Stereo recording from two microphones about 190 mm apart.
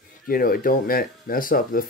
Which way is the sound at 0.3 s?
50° left (ahead or behind).